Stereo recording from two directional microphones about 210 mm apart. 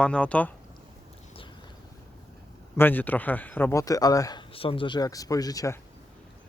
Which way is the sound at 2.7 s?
10° left (ahead or behind).